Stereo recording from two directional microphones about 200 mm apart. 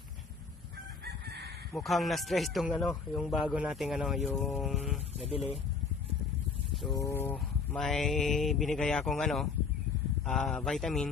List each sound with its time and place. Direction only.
1.0 s chicken: 55° right (ahead or behind)
1.8 s speech: centre (ahead or behind)
6.9 s speech: 15° left (ahead or behind)